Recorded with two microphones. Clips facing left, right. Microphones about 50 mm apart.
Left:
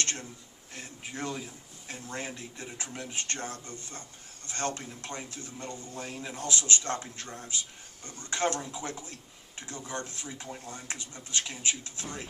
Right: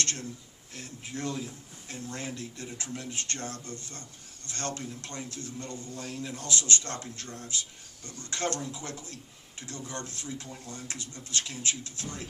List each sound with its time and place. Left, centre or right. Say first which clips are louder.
0.0 s a man's voice: even; centre